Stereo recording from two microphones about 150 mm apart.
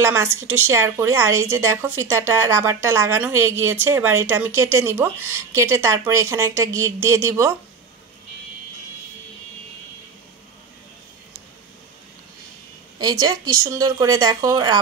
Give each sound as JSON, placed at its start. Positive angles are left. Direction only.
{"t": 0.0, "sound": "a woman's voice", "side_deg": -15}
{"t": 13.0, "sound": "a woman's voice", "side_deg": -25}